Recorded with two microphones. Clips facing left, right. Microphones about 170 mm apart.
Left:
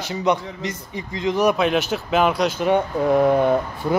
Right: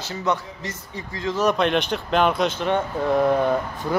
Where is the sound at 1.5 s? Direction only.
5° left (ahead or behind).